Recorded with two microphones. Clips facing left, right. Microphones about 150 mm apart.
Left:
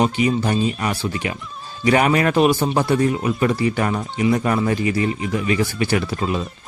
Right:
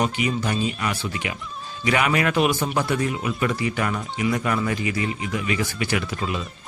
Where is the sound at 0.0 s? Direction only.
30° left (ahead or behind).